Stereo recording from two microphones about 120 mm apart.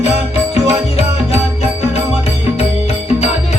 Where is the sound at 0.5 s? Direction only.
60° left (ahead or behind).